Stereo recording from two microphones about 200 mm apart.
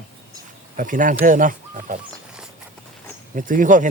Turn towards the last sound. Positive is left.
turn(degrees=-40)  # may be behind; listen again after turning